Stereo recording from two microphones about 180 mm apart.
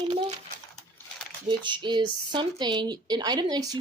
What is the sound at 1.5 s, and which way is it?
Speech, 25° right (ahead or behind).